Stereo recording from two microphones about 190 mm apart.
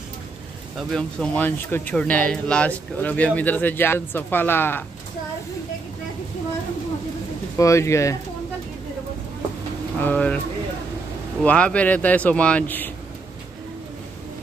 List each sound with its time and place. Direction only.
0.7 s speech: 5° left (ahead or behind)
7.5 s speech: 15° left (ahead or behind)
9.9 s speech: 10° left (ahead or behind)
11.4 s speech: 5° left (ahead or behind)